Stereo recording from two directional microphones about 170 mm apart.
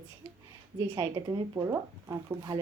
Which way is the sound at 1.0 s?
25° right (ahead or behind).